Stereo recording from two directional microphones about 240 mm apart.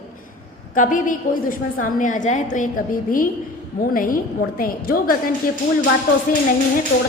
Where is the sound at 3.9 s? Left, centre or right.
Left.